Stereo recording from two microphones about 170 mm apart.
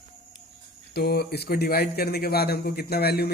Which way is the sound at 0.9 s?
70° left (ahead or behind).